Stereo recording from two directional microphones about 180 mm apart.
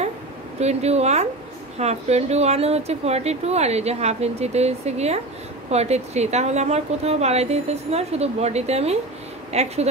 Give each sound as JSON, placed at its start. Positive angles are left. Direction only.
{"t": 0.6, "sound": "speech", "side_deg": -35}